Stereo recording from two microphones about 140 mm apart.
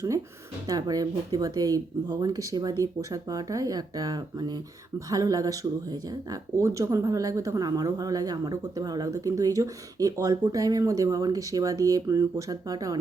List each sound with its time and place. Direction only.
0.7 s speech: 25° right (ahead or behind)